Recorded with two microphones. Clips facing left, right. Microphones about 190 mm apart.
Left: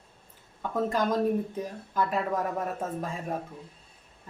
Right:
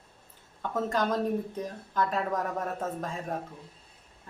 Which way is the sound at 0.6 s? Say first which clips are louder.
Left 1 dB; 10° left (ahead or behind).